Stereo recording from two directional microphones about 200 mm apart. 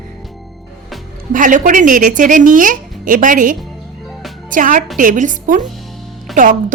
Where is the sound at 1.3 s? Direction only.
40° right (ahead or behind).